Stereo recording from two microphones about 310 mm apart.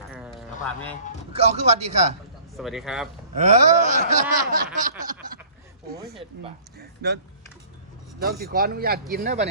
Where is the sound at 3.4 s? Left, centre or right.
Right.